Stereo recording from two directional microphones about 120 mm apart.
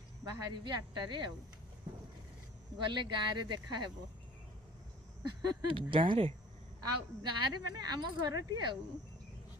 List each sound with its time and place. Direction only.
0.3 s speech: 30° right (ahead or behind)
2.7 s speech: 40° right (ahead or behind)
5.2 s speech: 45° right (ahead or behind)
7.2 s speech: 35° right (ahead or behind)